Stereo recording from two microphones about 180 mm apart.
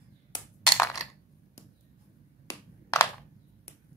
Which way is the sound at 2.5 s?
15° left (ahead or behind).